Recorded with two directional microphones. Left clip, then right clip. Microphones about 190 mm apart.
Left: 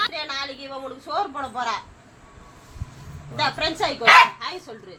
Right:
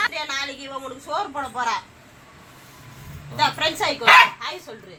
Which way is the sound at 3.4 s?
45° left (ahead or behind).